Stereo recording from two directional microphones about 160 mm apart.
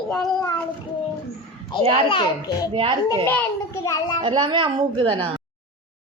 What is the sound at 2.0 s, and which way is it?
Speech, 25° left (ahead or behind).